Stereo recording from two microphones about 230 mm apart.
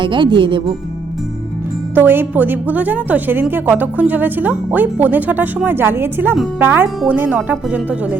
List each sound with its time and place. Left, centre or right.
0.0 s speech: right
2.0 s a woman's voice: centre